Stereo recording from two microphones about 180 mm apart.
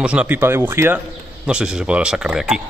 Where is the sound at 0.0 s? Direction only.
5° right (ahead or behind).